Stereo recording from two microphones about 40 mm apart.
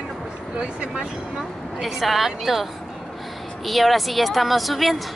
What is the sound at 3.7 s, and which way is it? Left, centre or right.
Speech, centre.